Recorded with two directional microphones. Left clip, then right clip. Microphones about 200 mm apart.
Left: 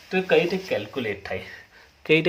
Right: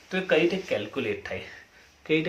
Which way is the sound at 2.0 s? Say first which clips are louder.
Left 6 dB; 50° left (ahead or behind).